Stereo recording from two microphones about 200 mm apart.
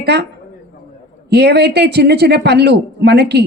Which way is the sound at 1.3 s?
55° right (ahead or behind).